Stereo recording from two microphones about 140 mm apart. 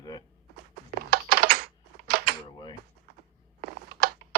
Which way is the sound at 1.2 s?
90° right.